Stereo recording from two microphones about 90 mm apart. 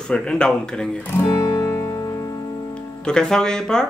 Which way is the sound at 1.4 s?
30° left (ahead or behind).